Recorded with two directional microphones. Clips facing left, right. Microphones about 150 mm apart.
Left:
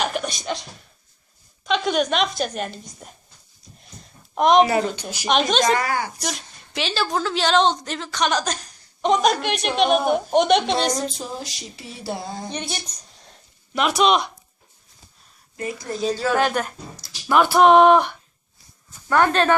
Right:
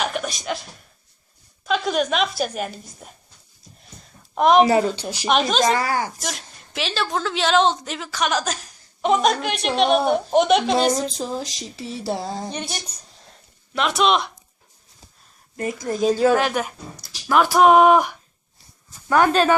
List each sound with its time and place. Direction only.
0.0 s a sound: centre (ahead or behind)
1.6 s a woman's voice: centre (ahead or behind)
4.4 s a woman's voice: centre (ahead or behind)
4.9 s speech: 30° right (ahead or behind)
5.3 s a woman's voice: 5° right (ahead or behind)
5.7 s a sound: 35° right (ahead or behind)
6.2 s a woman's voice: centre (ahead or behind)
11.5 s a sound: 35° right (ahead or behind)
12.5 s a woman's voice: 5° right (ahead or behind)
15.5 s a woman's voice: 45° right (ahead or behind)
16.3 s a woman's voice: 5° right (ahead or behind)